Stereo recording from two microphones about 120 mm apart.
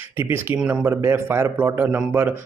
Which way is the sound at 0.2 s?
20° right (ahead or behind).